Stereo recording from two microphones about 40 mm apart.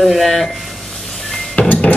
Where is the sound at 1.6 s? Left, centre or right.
Left.